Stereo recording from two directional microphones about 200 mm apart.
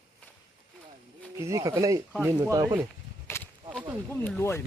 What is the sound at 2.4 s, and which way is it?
Speech, 20° right (ahead or behind).